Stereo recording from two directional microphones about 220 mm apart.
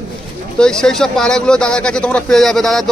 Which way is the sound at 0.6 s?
5° left (ahead or behind).